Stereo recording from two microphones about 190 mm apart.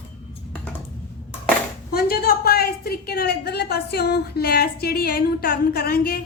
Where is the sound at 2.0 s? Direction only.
55° left (ahead or behind).